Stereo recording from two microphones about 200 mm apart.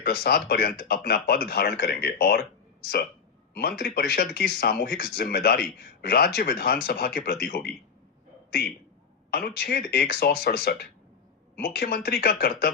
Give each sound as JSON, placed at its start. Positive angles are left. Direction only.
{"t": 0.0, "sound": "speech", "side_deg": 50}
{"t": 9.3, "sound": "speech", "side_deg": 50}